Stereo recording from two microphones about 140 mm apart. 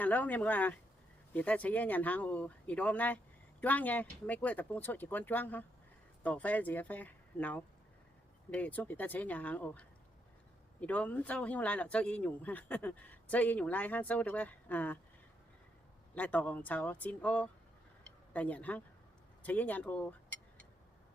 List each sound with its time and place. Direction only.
0.0 s speech: 10° left (ahead or behind)
16.1 s speech: 10° left (ahead or behind)
18.0 s a sound: 10° left (ahead or behind)
19.4 s speech: 10° left (ahead or behind)